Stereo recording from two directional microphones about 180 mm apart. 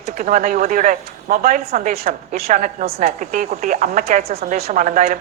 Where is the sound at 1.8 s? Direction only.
55° right (ahead or behind).